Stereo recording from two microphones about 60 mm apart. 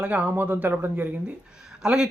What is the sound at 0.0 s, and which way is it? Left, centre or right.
Speech, right.